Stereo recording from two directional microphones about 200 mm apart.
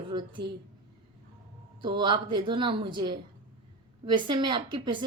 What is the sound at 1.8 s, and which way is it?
A woman's voice, 20° right (ahead or behind).